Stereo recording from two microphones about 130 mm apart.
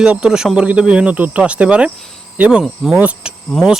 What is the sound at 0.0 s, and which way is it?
Speech, 5° right (ahead or behind).